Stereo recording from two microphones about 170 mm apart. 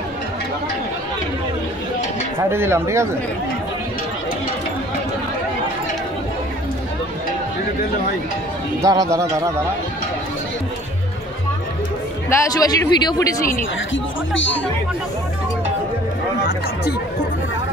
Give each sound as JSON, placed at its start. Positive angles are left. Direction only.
{"t": 2.5, "sound": "speech", "side_deg": -15}
{"t": 8.8, "sound": "speech", "side_deg": -20}
{"t": 12.3, "sound": "speech", "side_deg": 20}